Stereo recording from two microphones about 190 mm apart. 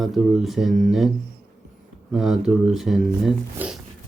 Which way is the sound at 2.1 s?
Centre (ahead or behind).